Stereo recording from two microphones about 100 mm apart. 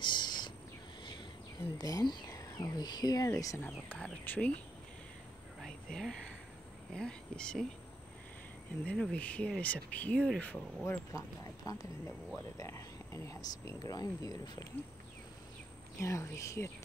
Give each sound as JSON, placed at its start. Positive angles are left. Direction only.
{"t": 0.0, "sound": "a sound", "side_deg": 50}
{"t": 1.8, "sound": "speech", "side_deg": 40}
{"t": 3.6, "sound": "speech", "side_deg": 15}
{"t": 5.6, "sound": "a sound", "side_deg": 5}
{"t": 6.9, "sound": "speech", "side_deg": 10}
{"t": 8.8, "sound": "speech", "side_deg": 5}
{"t": 10.9, "sound": "speech", "side_deg": 30}
{"t": 16.0, "sound": "speech", "side_deg": 30}